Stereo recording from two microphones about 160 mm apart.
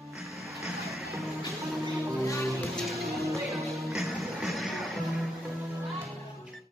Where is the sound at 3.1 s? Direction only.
20° right (ahead or behind).